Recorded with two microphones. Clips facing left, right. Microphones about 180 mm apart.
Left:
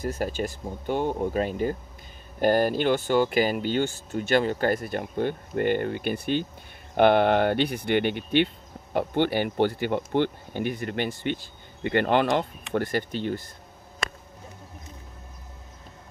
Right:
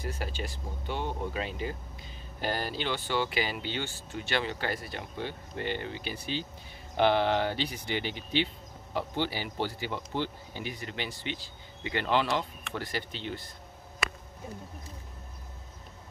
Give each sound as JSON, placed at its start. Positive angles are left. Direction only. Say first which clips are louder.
{"t": 0.0, "sound": "speech", "louder": "left 8 dB", "side_deg": 45}